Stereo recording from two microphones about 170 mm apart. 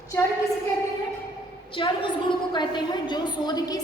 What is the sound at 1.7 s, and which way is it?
A woman's voice, 30° left (ahead or behind).